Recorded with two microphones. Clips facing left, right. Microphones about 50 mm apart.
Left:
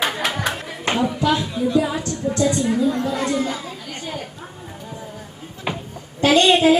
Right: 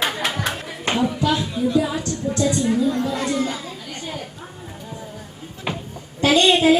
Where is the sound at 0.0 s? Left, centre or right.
Centre.